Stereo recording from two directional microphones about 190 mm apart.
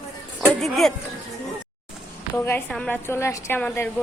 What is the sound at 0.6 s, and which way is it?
Speech, centre (ahead or behind).